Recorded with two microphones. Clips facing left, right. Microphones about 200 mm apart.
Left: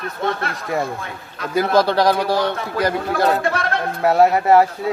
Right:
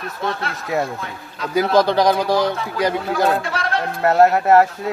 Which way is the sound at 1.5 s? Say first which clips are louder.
Right 1 dB; centre (ahead or behind).